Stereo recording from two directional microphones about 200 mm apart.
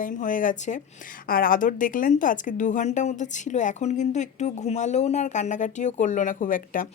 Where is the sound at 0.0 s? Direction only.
40° left (ahead or behind).